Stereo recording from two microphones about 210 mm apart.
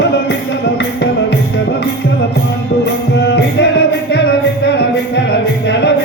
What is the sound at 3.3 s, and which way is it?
Music, 55° left (ahead or behind).